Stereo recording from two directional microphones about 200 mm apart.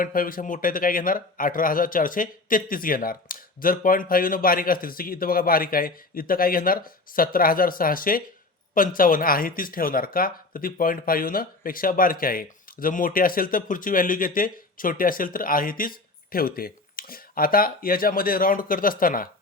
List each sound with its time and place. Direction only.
0.0 s speech: 45° left (ahead or behind)